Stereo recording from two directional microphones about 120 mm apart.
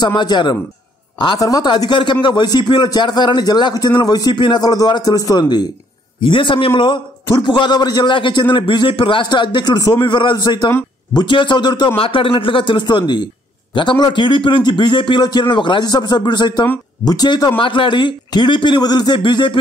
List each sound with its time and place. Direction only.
0.0 s a man's voice: 35° left (ahead or behind)
6.2 s a man's voice: 45° left (ahead or behind)